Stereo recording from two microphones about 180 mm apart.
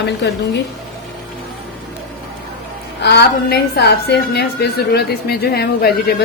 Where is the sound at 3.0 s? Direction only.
65° left (ahead or behind).